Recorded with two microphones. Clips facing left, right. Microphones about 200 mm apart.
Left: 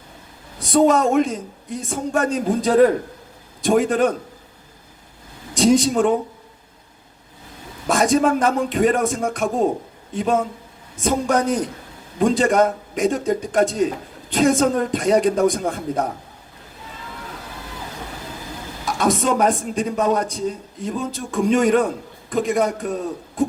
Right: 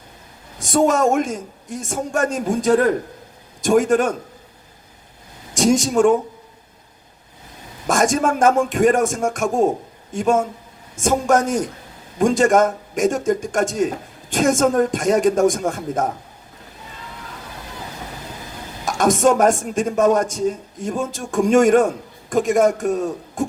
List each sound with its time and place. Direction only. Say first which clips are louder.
0.6 s a man's voice: left 1 dB; 45° right (ahead or behind)
5.5 s a man's voice: even; 45° right (ahead or behind)
7.9 s a man's voice: left 1 dB; 45° right (ahead or behind)
18.9 s a man's voice: right 4 dB; 45° right (ahead or behind)